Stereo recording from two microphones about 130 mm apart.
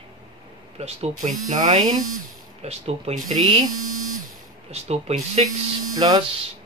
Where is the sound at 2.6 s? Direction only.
55° right (ahead or behind).